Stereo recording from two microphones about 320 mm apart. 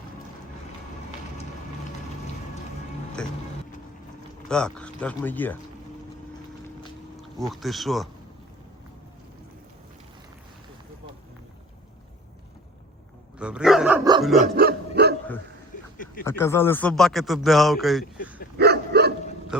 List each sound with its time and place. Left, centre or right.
3.2 s speech: centre
4.4 s speech: centre
7.2 s speech: centre
13.4 s dog: centre
14.4 s dog: right
16.2 s speech: centre
18.5 s dog: right